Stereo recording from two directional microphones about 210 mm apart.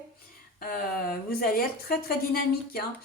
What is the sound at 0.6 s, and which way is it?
A woman's voice, 45° left (ahead or behind).